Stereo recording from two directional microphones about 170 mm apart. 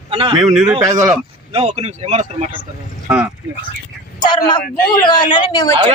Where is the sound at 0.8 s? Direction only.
20° right (ahead or behind).